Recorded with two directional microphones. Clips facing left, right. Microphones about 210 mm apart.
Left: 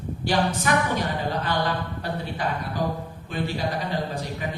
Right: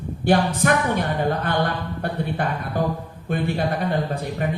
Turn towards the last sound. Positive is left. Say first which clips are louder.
# right 4 dB
turn(degrees=-55)  # may be behind; listen again after turning